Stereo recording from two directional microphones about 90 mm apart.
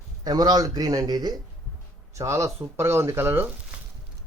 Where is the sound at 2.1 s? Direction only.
35° right (ahead or behind).